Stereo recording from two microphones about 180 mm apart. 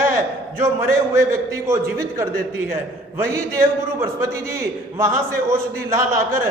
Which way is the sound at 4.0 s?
15° right (ahead or behind).